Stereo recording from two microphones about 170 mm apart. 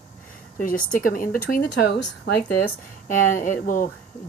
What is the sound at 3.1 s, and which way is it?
Speech, 50° left (ahead or behind).